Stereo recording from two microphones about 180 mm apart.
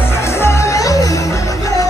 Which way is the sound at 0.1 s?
15° left (ahead or behind).